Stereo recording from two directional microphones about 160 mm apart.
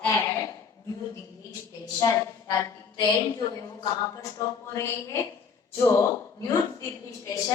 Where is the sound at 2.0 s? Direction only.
20° left (ahead or behind).